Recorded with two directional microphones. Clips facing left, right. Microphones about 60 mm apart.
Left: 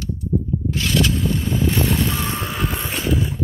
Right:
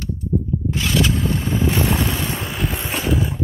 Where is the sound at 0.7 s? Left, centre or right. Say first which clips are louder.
Even; right.